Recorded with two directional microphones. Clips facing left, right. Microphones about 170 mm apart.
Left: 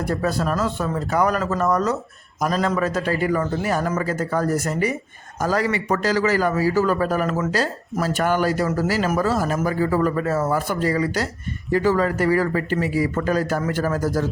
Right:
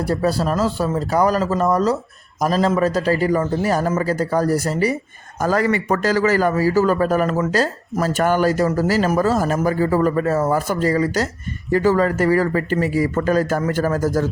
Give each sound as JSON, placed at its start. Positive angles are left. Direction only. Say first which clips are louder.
{"t": 0.0, "sound": "a man's voice", "louder": "right 3 dB", "side_deg": -30}
{"t": 5.4, "sound": "a man's voice", "louder": "right 3 dB", "side_deg": -50}